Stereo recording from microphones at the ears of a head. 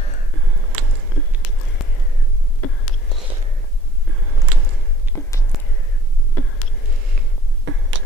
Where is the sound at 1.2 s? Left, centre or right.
Left.